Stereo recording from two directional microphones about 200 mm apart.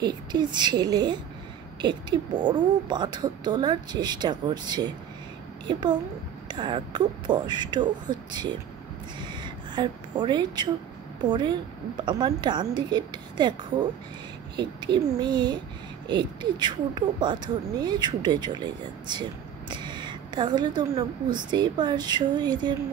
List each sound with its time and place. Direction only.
0.0 s speech: 20° right (ahead or behind)
9.2 s a sound: 25° right (ahead or behind)
11.2 s speech: 20° right (ahead or behind)
14.6 s speech: 20° right (ahead or behind)